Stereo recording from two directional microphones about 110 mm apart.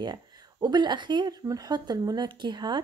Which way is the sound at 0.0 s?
40° right (ahead or behind).